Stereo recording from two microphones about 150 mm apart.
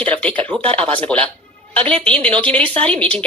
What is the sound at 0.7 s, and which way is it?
Speech, 35° right (ahead or behind).